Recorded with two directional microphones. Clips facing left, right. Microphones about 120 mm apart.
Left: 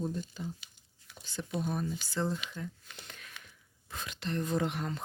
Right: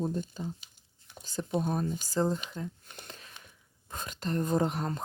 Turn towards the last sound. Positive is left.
turn(degrees=-35)  # may be behind; listen again after turning